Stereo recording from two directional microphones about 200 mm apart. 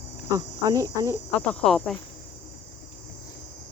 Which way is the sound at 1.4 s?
5° left (ahead or behind).